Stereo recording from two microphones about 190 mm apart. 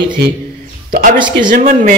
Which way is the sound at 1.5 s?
40° right (ahead or behind).